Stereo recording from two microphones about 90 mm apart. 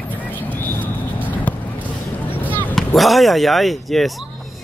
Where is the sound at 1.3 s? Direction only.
20° left (ahead or behind).